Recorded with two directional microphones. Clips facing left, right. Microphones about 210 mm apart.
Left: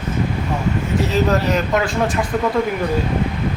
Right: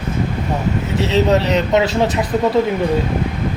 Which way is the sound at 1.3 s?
25° right (ahead or behind).